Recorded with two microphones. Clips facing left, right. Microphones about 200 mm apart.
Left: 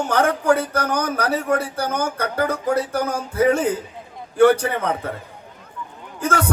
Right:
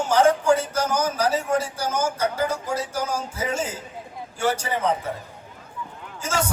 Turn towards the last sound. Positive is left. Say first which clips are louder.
# left 4 dB
turn(degrees=60)  # may be behind; listen again after turning